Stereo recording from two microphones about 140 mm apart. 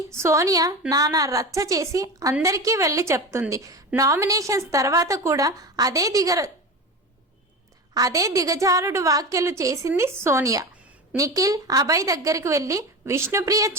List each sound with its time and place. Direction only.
0.1 s a woman's voice: 20° right (ahead or behind)
7.9 s a woman's voice: 25° right (ahead or behind)